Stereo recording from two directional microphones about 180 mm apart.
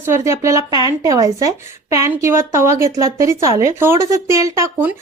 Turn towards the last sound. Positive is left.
turn(degrees=-15)  # may be behind; listen again after turning